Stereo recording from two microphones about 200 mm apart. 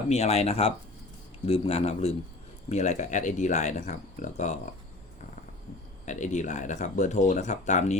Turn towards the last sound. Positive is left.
turn(degrees=35)  # may be behind; listen again after turning